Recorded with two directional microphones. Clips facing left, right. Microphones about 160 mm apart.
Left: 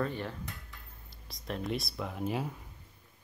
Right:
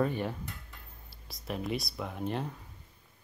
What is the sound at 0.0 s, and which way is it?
Dishes, 15° right (ahead or behind).